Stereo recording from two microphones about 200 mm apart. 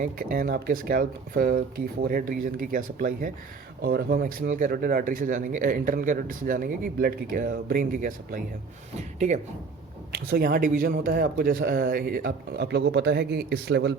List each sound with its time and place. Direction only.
0.0 s speech: 45° right (ahead or behind)
10.1 s speech: 50° right (ahead or behind)